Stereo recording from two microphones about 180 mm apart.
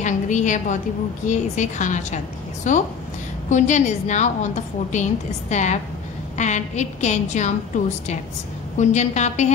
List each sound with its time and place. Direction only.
0.0 s a woman's voice: 45° left (ahead or behind)